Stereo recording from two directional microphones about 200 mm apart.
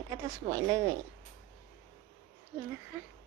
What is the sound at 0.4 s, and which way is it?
Speech, 30° right (ahead or behind).